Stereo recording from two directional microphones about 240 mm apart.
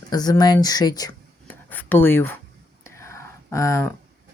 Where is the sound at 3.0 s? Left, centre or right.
Centre.